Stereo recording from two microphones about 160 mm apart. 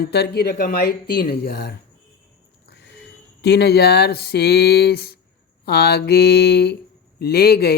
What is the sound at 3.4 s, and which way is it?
Speech, 90° left.